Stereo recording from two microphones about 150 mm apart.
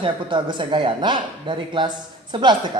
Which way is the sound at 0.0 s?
35° right (ahead or behind).